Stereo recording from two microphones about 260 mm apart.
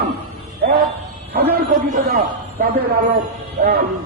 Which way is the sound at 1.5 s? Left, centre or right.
Right.